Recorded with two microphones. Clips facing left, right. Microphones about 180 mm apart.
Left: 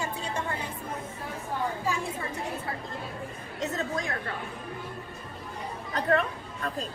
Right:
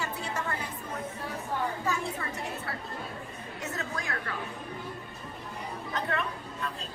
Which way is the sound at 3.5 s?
20° left (ahead or behind).